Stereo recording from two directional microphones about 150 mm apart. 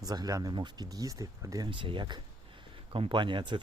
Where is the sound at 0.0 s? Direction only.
25° right (ahead or behind).